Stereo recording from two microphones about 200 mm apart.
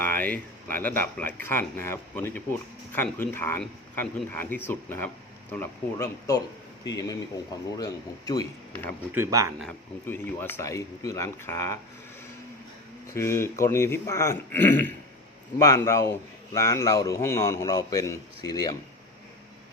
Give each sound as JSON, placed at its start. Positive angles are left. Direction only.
{"t": 0.0, "sound": "speech", "side_deg": 10}
{"t": 9.0, "sound": "speech", "side_deg": -10}
{"t": 9.6, "sound": "speech", "side_deg": 5}
{"t": 10.3, "sound": "speech", "side_deg": 15}
{"t": 13.1, "sound": "speech", "side_deg": 15}